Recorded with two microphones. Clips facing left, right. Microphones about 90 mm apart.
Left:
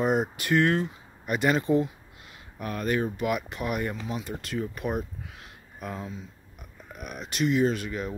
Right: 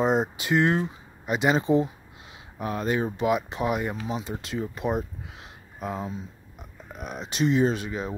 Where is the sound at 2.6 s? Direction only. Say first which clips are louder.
Right 1 dB; 20° right (ahead or behind).